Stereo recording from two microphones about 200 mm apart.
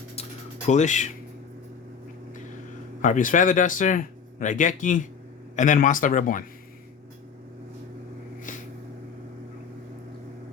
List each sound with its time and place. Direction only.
0.7 s speech: 35° left (ahead or behind)
3.0 s speech: 40° left (ahead or behind)